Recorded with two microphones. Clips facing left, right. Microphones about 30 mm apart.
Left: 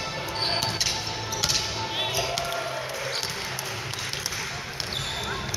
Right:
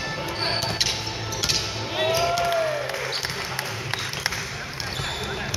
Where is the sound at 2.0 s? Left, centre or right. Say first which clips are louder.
Right 9 dB; right.